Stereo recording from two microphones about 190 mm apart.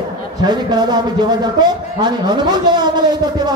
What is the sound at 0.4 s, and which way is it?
A man's voice, 20° right (ahead or behind).